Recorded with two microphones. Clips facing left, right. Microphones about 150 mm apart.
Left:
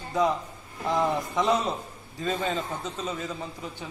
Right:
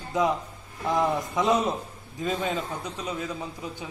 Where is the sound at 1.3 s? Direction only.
20° right (ahead or behind).